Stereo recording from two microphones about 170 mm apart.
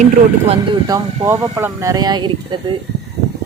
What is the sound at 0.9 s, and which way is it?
Speech, 20° right (ahead or behind).